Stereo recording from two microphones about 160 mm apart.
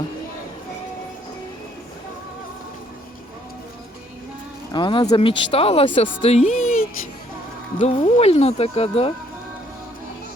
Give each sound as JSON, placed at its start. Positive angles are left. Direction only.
{"t": 4.7, "sound": "speech", "side_deg": 30}
{"t": 7.8, "sound": "speech", "side_deg": 40}